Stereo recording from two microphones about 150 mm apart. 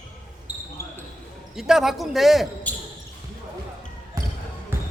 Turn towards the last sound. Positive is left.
turn(degrees=-15)  # may be behind; listen again after turning